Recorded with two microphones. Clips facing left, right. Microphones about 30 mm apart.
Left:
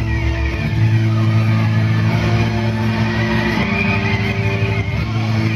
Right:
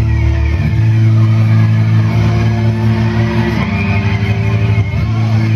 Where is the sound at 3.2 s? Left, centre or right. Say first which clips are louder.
Right 2 dB; centre.